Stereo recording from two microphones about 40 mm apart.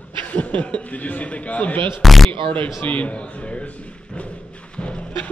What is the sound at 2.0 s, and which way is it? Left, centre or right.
Speech, centre.